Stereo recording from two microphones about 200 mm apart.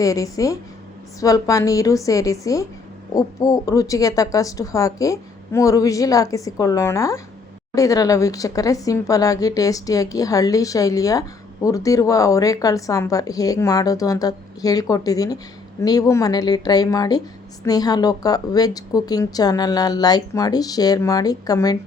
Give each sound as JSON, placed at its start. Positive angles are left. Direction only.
{"t": 0.0, "sound": "a woman's voice", "side_deg": 15}